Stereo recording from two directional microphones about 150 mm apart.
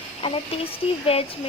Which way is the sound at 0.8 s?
45° left (ahead or behind).